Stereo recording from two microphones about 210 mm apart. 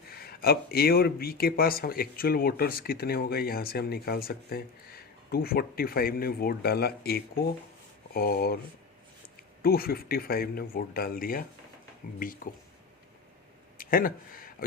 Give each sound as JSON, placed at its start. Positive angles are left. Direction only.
{"t": 0.2, "sound": "speech", "side_deg": 45}
{"t": 9.6, "sound": "speech", "side_deg": 45}
{"t": 13.7, "sound": "a sound", "side_deg": 40}